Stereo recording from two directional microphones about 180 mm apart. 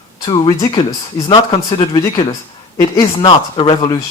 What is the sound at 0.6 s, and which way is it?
Speech, 25° left (ahead or behind).